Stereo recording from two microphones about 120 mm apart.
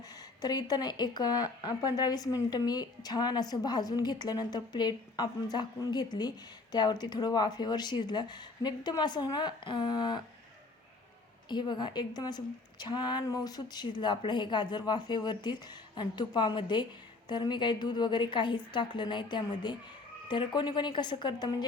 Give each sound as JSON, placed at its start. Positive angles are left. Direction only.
{"t": 0.4, "sound": "speech", "side_deg": 35}
{"t": 11.4, "sound": "speech", "side_deg": 40}